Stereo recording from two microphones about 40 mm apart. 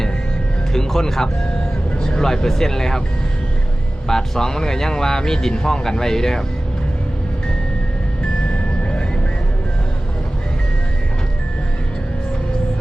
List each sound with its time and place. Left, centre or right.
0.7 s speech: centre
4.1 s speech: centre
8.4 s music: left